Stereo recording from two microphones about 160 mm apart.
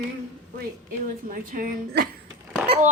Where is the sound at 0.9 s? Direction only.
60° right (ahead or behind).